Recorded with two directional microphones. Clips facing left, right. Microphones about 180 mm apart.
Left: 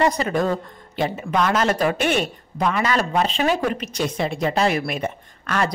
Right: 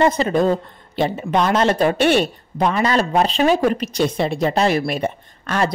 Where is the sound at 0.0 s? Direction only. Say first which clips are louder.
Right 4 dB; 25° right (ahead or behind).